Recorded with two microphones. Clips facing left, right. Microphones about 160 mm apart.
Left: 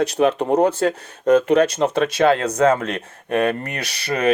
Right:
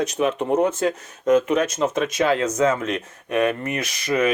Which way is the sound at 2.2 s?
60° left (ahead or behind).